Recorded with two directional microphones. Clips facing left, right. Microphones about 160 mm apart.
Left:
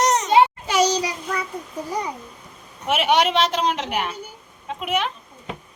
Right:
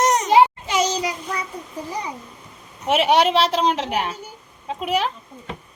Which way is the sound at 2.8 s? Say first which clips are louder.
Right 2 dB; 30° right (ahead or behind).